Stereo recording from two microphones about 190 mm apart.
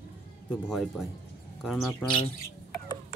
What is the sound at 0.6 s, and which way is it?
Speech, centre (ahead or behind).